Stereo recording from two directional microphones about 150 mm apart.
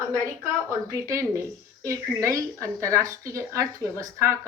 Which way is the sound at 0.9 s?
20° right (ahead or behind).